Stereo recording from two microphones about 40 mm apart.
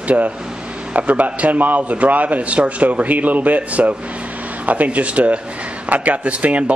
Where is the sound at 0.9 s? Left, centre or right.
Right.